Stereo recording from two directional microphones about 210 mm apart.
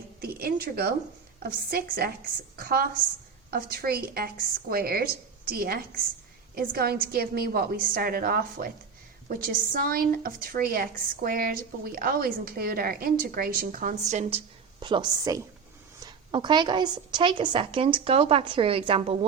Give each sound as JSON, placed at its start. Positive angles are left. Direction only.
{"t": 0.2, "sound": "a sound", "side_deg": -45}
{"t": 1.4, "sound": "a woman's voice", "side_deg": -45}
{"t": 14.1, "sound": "a woman's voice", "side_deg": -30}